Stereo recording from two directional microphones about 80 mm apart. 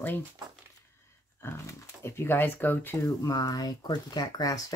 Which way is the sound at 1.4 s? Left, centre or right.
Left.